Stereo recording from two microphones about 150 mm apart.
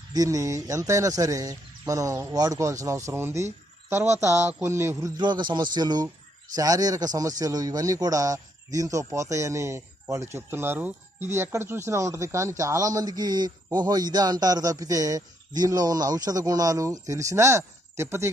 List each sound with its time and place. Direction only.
0.1 s speech: 25° right (ahead or behind)